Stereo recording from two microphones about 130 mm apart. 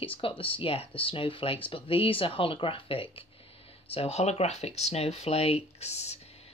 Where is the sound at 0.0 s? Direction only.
45° left (ahead or behind).